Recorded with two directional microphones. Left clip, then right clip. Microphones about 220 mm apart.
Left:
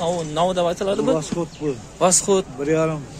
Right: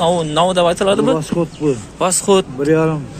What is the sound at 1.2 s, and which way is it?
Speech, 40° right (ahead or behind).